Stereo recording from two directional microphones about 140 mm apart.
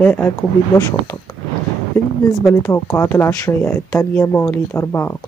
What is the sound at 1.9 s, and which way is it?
Speech, 20° left (ahead or behind).